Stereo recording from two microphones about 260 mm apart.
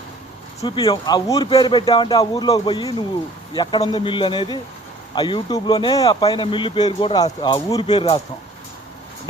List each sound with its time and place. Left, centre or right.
0.6 s speech: centre